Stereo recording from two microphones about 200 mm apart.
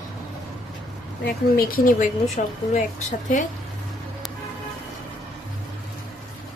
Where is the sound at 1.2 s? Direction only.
45° left (ahead or behind).